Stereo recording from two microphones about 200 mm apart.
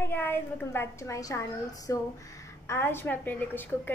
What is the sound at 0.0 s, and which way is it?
A woman's voice, 10° left (ahead or behind).